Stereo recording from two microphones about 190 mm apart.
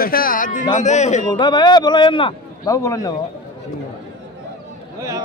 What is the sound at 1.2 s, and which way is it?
A man's voice, 25° left (ahead or behind).